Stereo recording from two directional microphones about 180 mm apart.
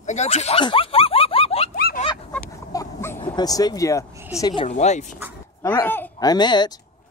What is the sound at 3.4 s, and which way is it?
Speech, 20° left (ahead or behind).